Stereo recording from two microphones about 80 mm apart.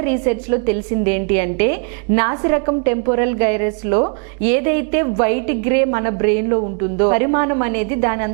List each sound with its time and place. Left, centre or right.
0.0 s a woman's voice: centre